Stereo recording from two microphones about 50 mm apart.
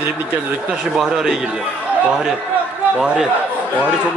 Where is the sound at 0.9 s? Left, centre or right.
Centre.